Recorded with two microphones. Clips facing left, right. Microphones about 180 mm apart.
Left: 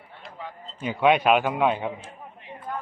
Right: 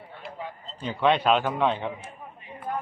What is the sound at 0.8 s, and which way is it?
A man's voice, 10° left (ahead or behind).